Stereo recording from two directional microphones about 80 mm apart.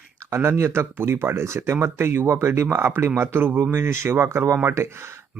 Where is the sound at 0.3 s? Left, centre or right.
Right.